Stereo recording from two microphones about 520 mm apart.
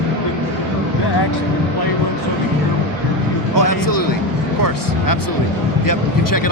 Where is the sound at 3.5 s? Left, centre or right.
Left.